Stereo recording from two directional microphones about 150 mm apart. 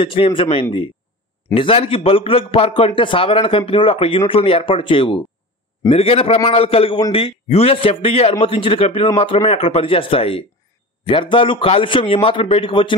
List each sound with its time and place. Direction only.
0.0 s a man's voice: 35° left (ahead or behind)